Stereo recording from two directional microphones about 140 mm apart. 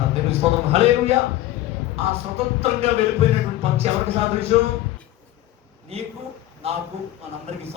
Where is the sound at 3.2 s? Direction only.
45° right (ahead or behind).